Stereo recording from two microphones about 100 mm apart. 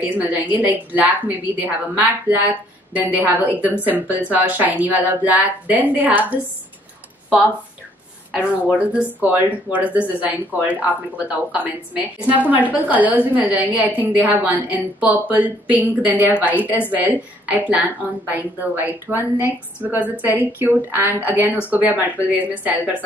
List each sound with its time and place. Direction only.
0.3 s a woman's voice: 15° right (ahead or behind)
8.4 s a woman's voice: 10° right (ahead or behind)